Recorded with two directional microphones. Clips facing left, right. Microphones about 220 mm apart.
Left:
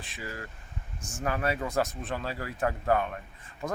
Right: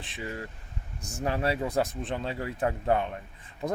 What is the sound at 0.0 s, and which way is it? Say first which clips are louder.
Speech: right 3 dB; 25° right (ahead or behind).